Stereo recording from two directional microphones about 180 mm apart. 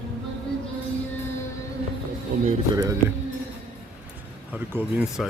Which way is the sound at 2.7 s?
20° right (ahead or behind).